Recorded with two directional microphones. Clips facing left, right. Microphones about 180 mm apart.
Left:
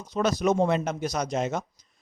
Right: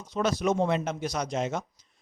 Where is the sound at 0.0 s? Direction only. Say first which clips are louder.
Left 2 dB; 40° left (ahead or behind).